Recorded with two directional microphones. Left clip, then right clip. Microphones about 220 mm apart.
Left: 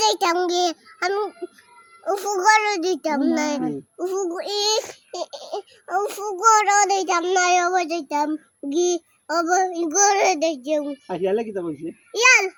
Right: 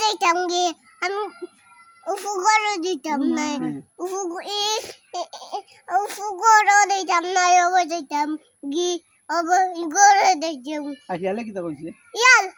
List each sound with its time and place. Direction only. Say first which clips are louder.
0.0 s a child's voice: even; centre (ahead or behind)
3.9 s child singing: left 3 dB; 5° right (ahead or behind)
11.1 s speech: left 3 dB; 25° right (ahead or behind)
12.1 s child singing: right 1 dB; 10° right (ahead or behind)